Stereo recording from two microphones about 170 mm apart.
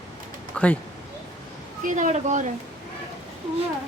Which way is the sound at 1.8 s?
50° right (ahead or behind).